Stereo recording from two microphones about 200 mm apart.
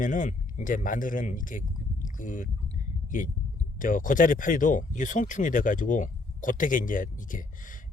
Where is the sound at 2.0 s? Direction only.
40° left (ahead or behind).